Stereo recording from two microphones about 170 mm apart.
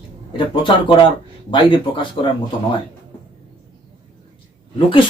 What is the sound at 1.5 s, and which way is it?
Speech, 30° left (ahead or behind).